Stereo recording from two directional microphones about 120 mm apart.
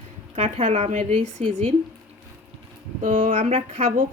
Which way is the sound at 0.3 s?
65° right (ahead or behind).